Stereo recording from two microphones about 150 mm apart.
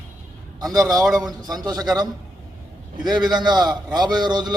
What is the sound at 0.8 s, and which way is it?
A man's voice, 25° right (ahead or behind).